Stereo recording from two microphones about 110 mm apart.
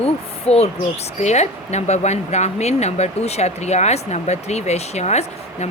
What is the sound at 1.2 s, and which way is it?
A woman's voice, 90° left.